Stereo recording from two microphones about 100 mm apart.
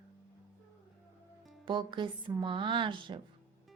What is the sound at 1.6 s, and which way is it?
Speech, 55° right (ahead or behind).